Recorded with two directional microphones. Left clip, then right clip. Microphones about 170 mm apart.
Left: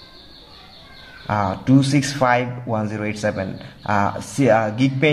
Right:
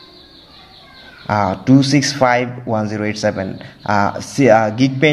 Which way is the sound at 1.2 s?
20° right (ahead or behind).